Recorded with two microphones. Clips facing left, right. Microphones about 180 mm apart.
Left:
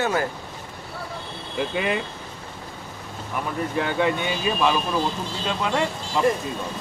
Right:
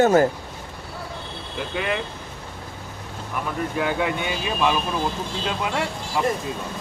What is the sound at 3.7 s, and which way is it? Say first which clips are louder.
Speech: left 2 dB; 10° right (ahead or behind).